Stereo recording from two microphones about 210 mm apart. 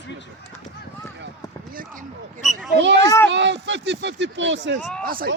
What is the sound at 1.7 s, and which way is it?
Speech, 40° right (ahead or behind).